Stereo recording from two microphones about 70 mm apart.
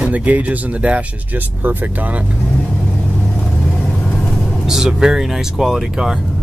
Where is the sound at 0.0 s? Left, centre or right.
Right.